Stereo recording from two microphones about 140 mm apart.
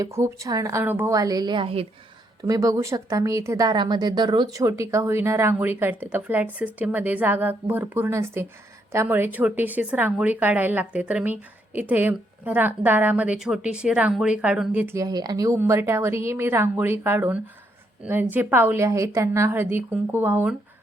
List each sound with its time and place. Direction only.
0.0 s a woman's voice: 20° right (ahead or behind); by 1.9 s 40° right (ahead or behind)
2.4 s a woman's voice: 25° right (ahead or behind)